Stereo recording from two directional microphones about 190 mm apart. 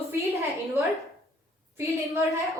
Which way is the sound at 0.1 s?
15° right (ahead or behind).